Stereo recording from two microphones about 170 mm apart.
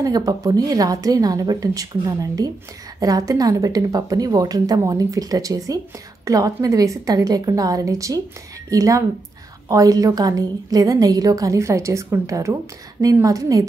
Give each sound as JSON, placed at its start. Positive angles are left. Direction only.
{"t": 0.0, "sound": "a woman's voice", "side_deg": -20}